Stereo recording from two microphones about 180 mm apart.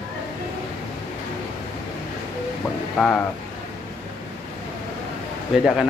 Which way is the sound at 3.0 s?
5° right (ahead or behind).